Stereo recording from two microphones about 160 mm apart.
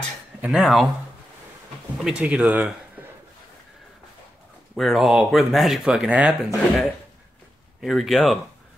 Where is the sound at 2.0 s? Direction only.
5° right (ahead or behind).